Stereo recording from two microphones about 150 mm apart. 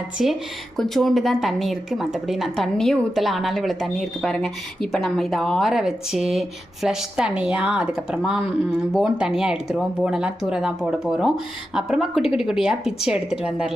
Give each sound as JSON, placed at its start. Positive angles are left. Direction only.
{"t": 0.2, "sound": "speech", "side_deg": 0}